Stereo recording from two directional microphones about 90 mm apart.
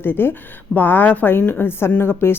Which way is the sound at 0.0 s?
25° left (ahead or behind).